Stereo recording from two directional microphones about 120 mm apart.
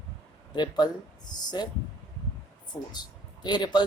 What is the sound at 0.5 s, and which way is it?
Speech, 35° left (ahead or behind).